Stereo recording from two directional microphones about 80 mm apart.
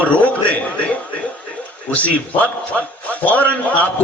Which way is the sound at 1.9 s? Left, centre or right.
Centre.